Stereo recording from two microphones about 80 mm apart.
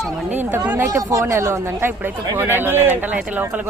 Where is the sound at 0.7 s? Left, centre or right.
Right.